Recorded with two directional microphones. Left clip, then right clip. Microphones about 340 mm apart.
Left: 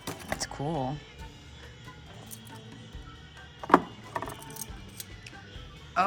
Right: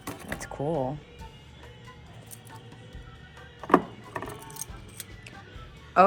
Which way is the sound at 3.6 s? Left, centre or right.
Centre.